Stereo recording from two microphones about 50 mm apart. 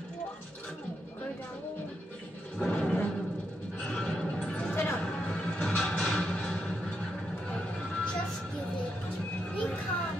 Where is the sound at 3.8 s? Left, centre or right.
Centre.